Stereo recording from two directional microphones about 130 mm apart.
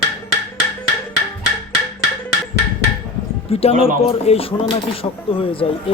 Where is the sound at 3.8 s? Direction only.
50° left (ahead or behind).